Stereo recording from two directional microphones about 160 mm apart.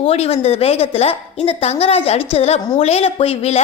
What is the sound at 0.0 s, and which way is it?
A woman's voice, 40° left (ahead or behind).